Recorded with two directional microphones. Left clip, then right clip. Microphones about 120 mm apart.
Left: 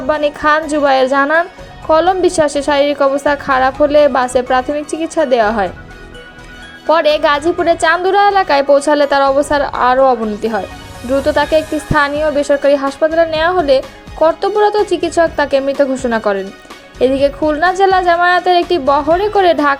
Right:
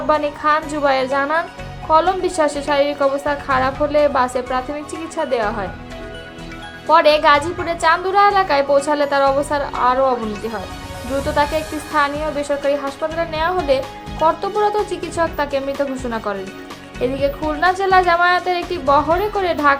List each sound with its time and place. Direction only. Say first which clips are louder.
0.1 s a woman's voice: left 4 dB; 55° left (ahead or behind)
6.8 s a woman's voice: left 1 dB; 50° left (ahead or behind)